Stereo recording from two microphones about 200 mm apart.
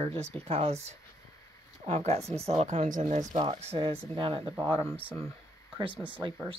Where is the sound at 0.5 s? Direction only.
30° right (ahead or behind).